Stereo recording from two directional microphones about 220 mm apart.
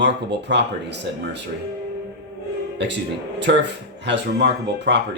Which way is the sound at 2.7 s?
50° right (ahead or behind).